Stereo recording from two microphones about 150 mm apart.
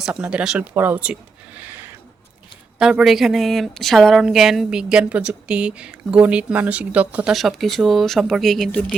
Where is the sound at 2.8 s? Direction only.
5° right (ahead or behind).